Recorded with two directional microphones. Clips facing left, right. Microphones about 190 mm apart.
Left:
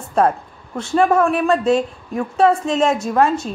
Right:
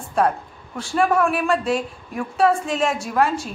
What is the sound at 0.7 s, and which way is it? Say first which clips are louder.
A woman's voice: left 4 dB; 25° left (ahead or behind).